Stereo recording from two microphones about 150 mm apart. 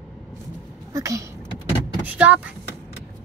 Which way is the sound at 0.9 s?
20° right (ahead or behind).